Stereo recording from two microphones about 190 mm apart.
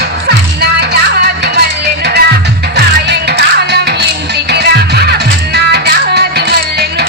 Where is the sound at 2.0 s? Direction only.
60° right (ahead or behind).